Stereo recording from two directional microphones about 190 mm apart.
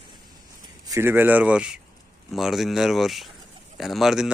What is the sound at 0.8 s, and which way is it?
Speech, 15° right (ahead or behind).